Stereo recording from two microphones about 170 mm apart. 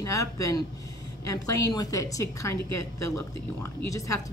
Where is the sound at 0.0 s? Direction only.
20° left (ahead or behind).